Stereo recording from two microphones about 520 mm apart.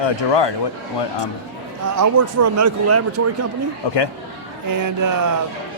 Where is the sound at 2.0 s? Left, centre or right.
Right.